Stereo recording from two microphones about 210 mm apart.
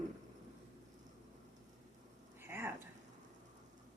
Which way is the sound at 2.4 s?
10° right (ahead or behind).